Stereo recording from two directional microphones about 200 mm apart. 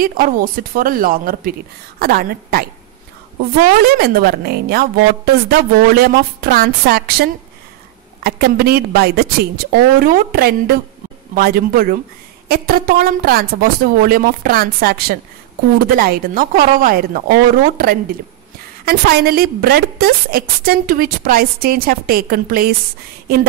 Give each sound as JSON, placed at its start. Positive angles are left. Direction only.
{"t": 0.0, "sound": "a woman's voice", "side_deg": -45}
{"t": 3.8, "sound": "a woman's voice", "side_deg": -50}